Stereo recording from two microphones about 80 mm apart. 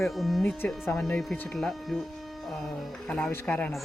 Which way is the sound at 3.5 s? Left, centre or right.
Centre.